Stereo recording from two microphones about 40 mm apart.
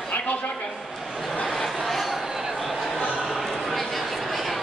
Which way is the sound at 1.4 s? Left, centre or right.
Centre.